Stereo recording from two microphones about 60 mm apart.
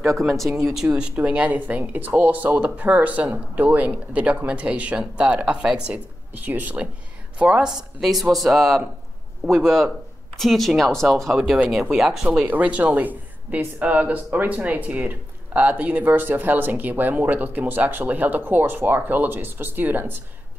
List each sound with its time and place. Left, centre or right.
0.2 s speech: centre
0.8 s speech: centre
6.3 s speech: right
7.3 s speech: centre
12.4 s speech: right